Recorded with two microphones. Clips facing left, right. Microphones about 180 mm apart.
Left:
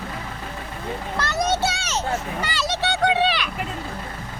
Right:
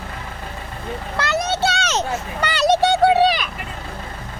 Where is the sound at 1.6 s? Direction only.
70° right (ahead or behind); by 2.9 s 55° right (ahead or behind).